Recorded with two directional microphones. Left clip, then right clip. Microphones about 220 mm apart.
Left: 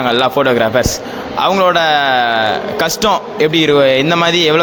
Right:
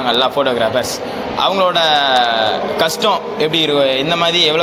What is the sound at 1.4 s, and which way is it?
Speech, 90° left.